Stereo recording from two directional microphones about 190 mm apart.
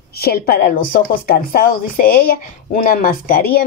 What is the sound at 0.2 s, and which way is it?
Speech, 55° left (ahead or behind).